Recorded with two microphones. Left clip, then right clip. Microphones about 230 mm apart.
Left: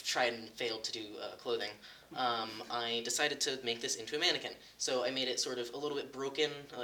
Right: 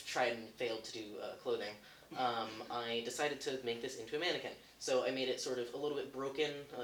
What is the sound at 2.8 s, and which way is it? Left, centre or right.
Speech, left.